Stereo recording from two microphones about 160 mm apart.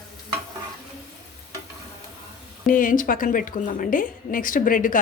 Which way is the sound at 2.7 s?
60° left (ahead or behind).